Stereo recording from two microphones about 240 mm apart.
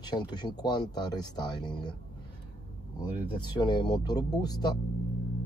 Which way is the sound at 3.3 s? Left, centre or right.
Centre.